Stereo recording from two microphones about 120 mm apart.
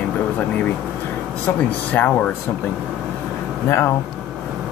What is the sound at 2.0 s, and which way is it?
Speech, 15° left (ahead or behind).